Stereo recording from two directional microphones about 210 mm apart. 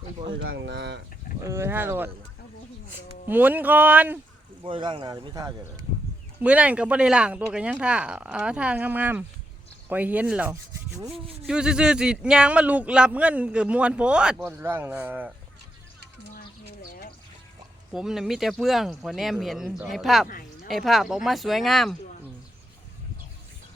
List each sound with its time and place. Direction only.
0.3 s speech: 60° right (ahead or behind)
1.4 s rub: 15° right (ahead or behind)
3.2 s rub: 10° right (ahead or behind)
4.6 s speech: 25° right (ahead or behind)
6.4 s speech: 5° right (ahead or behind)
9.9 s rub: 5° right (ahead or behind)
11.4 s speech: 5° right (ahead or behind)
17.9 s speech: centre (ahead or behind)
20.2 s a sound: 40° left (ahead or behind)
20.7 s speech: centre (ahead or behind)